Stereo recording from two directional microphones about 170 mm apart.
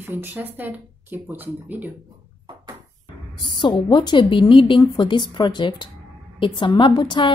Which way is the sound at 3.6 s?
30° left (ahead or behind).